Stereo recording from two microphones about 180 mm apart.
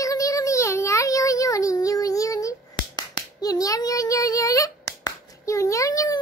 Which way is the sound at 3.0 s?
20° left (ahead or behind).